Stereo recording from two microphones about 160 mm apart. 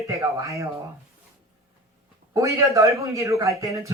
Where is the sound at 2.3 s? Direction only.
20° right (ahead or behind).